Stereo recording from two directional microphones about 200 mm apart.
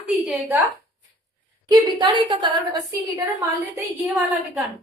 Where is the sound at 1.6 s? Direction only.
20° right (ahead or behind).